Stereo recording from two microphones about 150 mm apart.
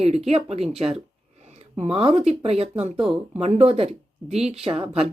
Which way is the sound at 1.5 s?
45° right (ahead or behind).